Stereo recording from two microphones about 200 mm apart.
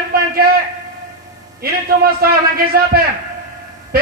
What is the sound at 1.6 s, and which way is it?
A man's voice, 50° right (ahead or behind).